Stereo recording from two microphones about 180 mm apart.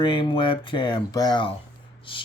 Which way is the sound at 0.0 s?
25° left (ahead or behind).